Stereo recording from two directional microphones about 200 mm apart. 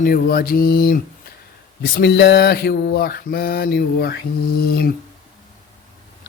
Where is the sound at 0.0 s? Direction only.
50° left (ahead or behind).